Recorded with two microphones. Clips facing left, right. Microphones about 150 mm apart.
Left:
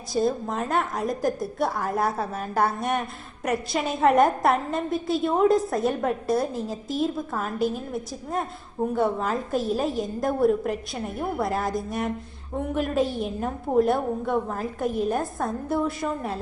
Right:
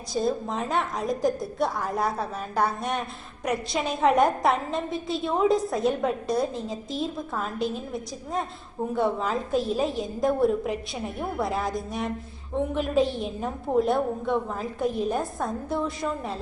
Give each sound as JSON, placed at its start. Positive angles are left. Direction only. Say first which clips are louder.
{"t": 0.1, "sound": "a woman's voice", "louder": "left 2 dB", "side_deg": 0}